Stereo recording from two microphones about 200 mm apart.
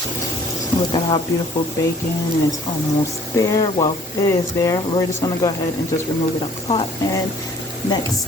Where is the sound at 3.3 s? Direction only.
15° left (ahead or behind).